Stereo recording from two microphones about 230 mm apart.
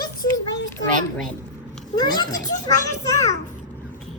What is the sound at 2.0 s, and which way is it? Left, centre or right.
A child's voice, centre.